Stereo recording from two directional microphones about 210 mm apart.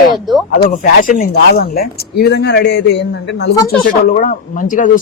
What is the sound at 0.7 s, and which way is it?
Speech, 40° left (ahead or behind).